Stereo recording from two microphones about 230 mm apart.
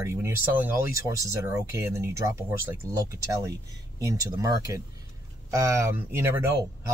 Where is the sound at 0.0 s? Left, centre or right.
Centre.